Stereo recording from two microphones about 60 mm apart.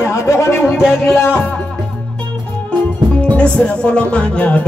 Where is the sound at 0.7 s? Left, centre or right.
Centre.